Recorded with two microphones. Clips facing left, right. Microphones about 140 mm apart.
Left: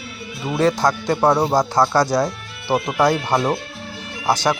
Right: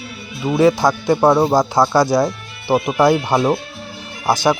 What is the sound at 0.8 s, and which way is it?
Speech, 10° right (ahead or behind).